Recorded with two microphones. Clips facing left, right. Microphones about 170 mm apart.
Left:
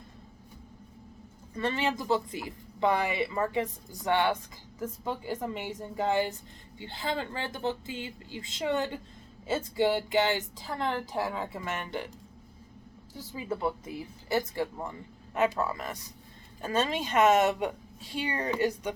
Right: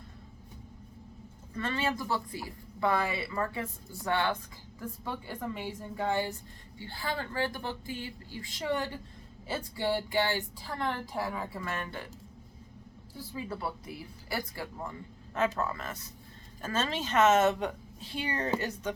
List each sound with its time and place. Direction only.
1.5 s a woman's voice: 15° left (ahead or behind)
5.6 s a woman's voice: 20° left (ahead or behind)
13.5 s a woman's voice: 20° left (ahead or behind)